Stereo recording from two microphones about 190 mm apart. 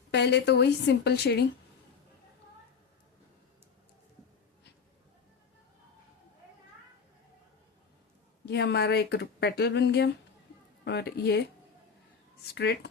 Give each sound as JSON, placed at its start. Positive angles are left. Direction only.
{"t": 0.1, "sound": "speech", "side_deg": 65}
{"t": 8.4, "sound": "speech", "side_deg": 60}
{"t": 12.5, "sound": "speech", "side_deg": 60}